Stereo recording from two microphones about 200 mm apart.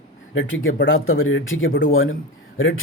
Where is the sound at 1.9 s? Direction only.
90° left.